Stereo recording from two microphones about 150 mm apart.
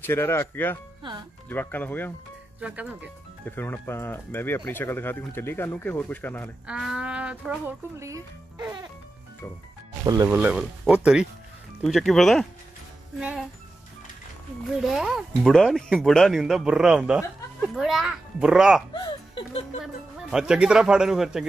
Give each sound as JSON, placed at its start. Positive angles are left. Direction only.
{"t": 0.0, "sound": "speech", "side_deg": 15}
{"t": 2.6, "sound": "livestock", "side_deg": -10}
{"t": 3.4, "sound": "speech", "side_deg": 15}
{"t": 6.7, "sound": "livestock", "side_deg": -5}
{"t": 10.0, "sound": "speech", "side_deg": -20}
{"t": 10.3, "sound": "livestock", "side_deg": -10}
{"t": 11.8, "sound": "speech", "side_deg": 0}
{"t": 13.2, "sound": "livestock", "side_deg": -5}
{"t": 14.8, "sound": "speech", "side_deg": -5}
{"t": 18.9, "sound": "speech", "side_deg": 35}
{"t": 19.8, "sound": "speech", "side_deg": -5}